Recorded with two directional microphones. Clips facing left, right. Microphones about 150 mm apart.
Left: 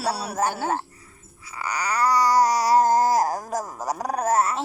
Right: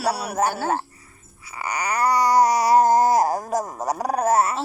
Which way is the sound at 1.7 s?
55° right (ahead or behind).